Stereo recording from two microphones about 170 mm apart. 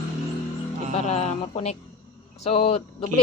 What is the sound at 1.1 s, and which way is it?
Speech, 40° left (ahead or behind).